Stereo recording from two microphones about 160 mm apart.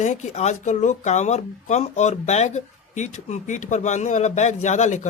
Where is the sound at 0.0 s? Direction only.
45° left (ahead or behind).